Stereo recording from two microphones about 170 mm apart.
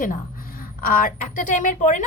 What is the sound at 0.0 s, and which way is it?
A woman's voice, 55° left (ahead or behind).